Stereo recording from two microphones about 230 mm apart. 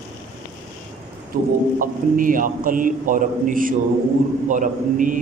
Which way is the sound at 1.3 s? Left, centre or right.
Right.